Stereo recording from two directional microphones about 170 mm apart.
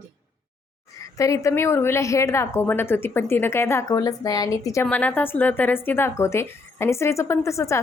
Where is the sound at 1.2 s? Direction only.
20° left (ahead or behind).